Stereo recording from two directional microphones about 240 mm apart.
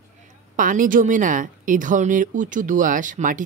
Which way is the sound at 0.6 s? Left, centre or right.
Right.